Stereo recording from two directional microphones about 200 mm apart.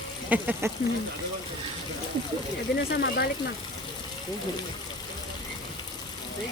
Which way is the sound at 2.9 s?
55° left (ahead or behind).